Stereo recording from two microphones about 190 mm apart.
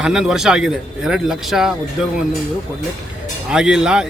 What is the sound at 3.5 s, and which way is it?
Speech, 5° right (ahead or behind).